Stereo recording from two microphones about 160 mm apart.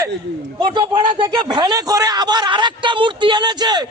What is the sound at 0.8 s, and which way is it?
A man's voice, 25° right (ahead or behind).